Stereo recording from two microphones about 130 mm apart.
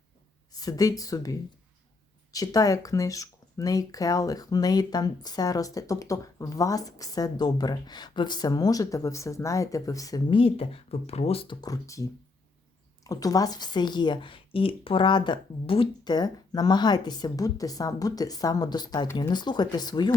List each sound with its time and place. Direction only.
0.5 s speech: 30° left (ahead or behind)
10.2 s speech: 45° left (ahead or behind)
11.6 s speech: 25° left (ahead or behind)
13.1 s speech: 30° left (ahead or behind)